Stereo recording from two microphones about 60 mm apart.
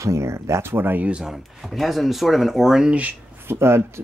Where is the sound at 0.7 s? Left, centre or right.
Right.